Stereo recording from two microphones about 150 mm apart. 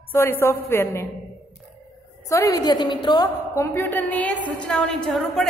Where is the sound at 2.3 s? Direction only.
25° left (ahead or behind).